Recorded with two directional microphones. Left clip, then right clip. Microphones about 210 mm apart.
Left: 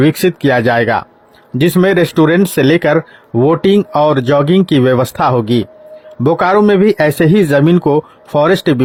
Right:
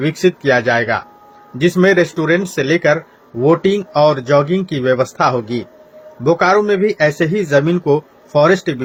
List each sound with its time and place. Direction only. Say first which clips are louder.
0.0 s speech: left 3 dB; 45° left (ahead or behind)